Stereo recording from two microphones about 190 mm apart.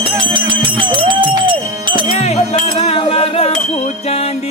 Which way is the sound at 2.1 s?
35° left (ahead or behind).